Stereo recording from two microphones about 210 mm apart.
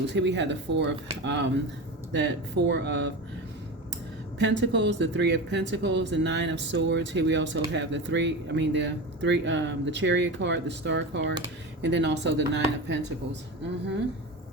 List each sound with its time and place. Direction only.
0.1 s speech: 55° right (ahead or behind)
4.4 s speech: 60° right (ahead or behind)